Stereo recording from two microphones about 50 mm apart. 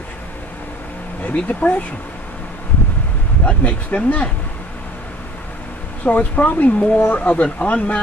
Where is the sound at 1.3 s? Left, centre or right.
Left.